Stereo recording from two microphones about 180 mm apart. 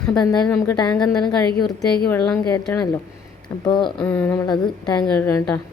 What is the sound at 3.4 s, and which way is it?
Speech, 25° left (ahead or behind).